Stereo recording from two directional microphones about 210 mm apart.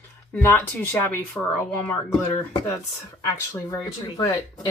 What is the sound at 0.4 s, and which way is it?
Speech, 10° left (ahead or behind).